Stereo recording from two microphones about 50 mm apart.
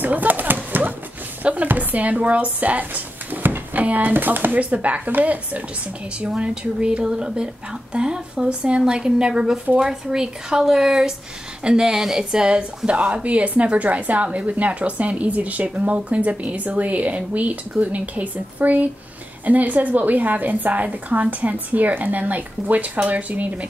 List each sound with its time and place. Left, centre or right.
0.0 s a sound: right
1.4 s a woman's voice: right
4.6 s a woman's voice: right